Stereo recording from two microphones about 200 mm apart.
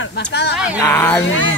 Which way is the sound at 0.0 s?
60° left (ahead or behind).